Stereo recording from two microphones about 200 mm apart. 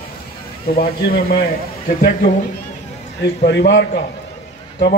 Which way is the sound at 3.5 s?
60° left (ahead or behind).